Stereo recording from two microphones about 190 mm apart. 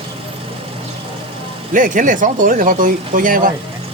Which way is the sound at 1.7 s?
45° right (ahead or behind).